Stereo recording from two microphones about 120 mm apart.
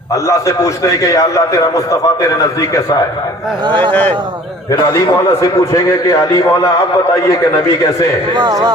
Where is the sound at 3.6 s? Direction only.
40° right (ahead or behind).